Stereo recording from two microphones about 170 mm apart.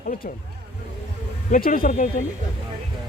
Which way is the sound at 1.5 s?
50° left (ahead or behind).